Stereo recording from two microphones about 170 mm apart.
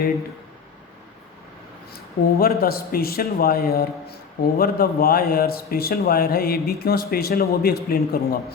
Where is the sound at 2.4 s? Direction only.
65° left (ahead or behind).